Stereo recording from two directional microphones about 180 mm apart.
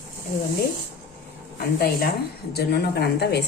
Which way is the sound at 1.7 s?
60° left (ahead or behind).